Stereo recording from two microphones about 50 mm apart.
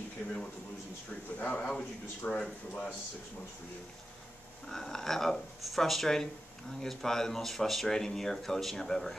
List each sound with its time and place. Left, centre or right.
1.4 s a man's voice: left
4.6 s speech: centre